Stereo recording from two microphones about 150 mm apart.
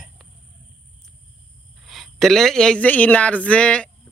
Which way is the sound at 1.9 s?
Centre (ahead or behind).